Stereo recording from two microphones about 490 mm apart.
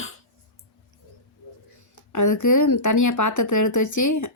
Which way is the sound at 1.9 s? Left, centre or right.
Left.